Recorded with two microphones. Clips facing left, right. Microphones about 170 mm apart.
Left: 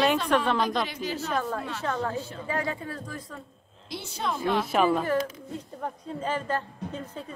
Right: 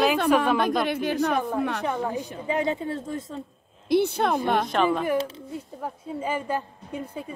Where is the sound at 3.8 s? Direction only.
60° right (ahead or behind).